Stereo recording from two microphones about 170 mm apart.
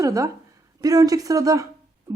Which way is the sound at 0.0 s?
20° right (ahead or behind).